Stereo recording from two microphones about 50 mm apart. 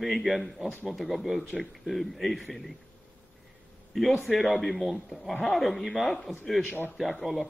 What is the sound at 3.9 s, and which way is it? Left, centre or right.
Speech, centre.